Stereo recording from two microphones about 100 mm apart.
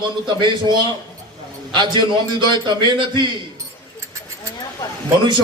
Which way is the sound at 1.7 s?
50° right (ahead or behind).